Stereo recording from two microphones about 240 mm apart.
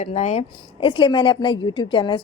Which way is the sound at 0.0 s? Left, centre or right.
Left.